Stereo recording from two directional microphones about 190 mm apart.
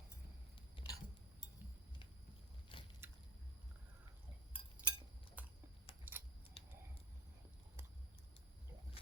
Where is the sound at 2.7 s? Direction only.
30° left (ahead or behind).